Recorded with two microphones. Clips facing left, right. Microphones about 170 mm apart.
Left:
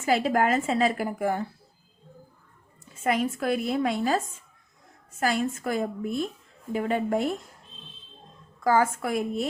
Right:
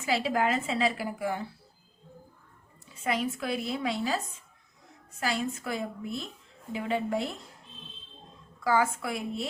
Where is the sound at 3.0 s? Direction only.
50° left (ahead or behind).